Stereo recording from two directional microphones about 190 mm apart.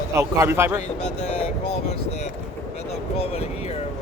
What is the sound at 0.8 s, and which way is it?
Speech, 35° left (ahead or behind).